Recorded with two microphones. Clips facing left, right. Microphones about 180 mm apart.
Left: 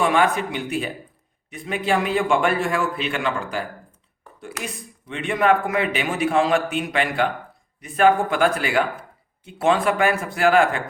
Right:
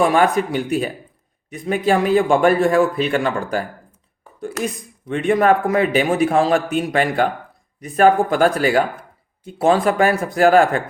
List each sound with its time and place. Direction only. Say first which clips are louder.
0.0 s a man's voice: right 4 dB; 40° right (ahead or behind)